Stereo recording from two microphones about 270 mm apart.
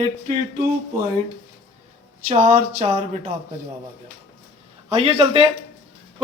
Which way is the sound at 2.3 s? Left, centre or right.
Right.